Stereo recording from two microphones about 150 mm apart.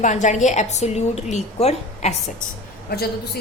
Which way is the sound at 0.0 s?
55° left (ahead or behind).